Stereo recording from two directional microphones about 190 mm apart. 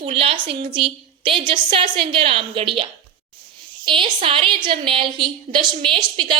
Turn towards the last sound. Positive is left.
turn(degrees=-25)  # may be behind; listen again after turning